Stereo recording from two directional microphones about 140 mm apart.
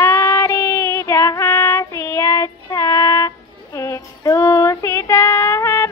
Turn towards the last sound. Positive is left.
turn(degrees=20)  # may be behind; listen again after turning